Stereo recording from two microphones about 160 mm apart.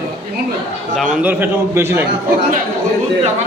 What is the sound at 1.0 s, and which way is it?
A man's voice, 5° right (ahead or behind).